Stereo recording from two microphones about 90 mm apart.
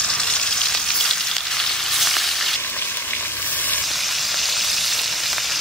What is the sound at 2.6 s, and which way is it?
Frying, 20° left (ahead or behind).